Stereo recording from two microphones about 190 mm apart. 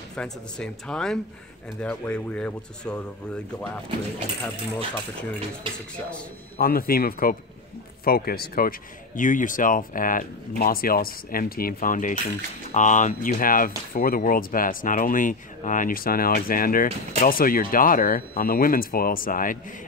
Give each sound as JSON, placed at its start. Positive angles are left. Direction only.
{"t": 0.1, "sound": "speech", "side_deg": 5}
{"t": 6.6, "sound": "speech", "side_deg": 50}